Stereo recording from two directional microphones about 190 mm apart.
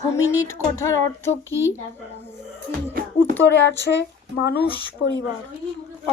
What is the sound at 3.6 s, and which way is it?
Speech, 65° left (ahead or behind).